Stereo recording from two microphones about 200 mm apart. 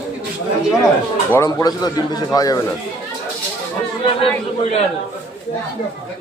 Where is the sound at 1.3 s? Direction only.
15° left (ahead or behind).